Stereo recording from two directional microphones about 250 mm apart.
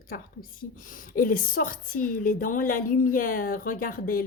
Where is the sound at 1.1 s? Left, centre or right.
Left.